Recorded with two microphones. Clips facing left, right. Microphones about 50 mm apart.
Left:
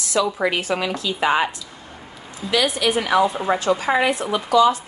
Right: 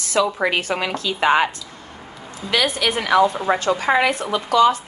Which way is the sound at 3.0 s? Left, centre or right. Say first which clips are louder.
Right 3 dB; right.